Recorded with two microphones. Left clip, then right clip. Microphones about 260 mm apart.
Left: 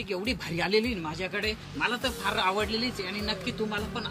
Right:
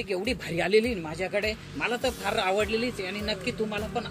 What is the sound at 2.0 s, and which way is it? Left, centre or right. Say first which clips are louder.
Speech: right 1 dB; left.